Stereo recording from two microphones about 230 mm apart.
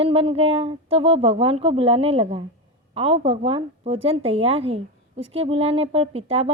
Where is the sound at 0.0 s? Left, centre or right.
Right.